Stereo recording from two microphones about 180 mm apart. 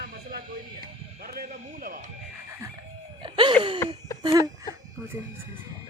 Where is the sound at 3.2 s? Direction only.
25° right (ahead or behind).